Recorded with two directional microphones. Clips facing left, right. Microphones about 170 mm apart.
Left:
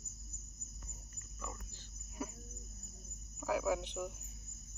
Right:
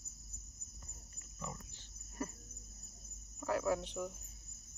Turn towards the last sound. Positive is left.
turn(degrees=5)  # may be behind; listen again after turning